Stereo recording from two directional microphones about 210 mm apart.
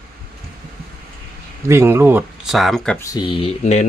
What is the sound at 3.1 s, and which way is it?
Speech, 25° left (ahead or behind).